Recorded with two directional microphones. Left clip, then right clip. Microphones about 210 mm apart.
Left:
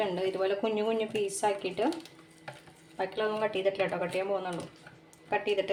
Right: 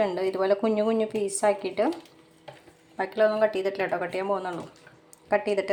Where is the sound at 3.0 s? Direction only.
20° right (ahead or behind).